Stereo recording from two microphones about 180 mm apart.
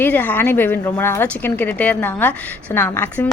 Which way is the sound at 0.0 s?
10° left (ahead or behind).